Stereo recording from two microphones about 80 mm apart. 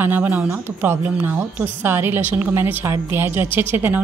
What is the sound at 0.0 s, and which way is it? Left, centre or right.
A woman's voice, right.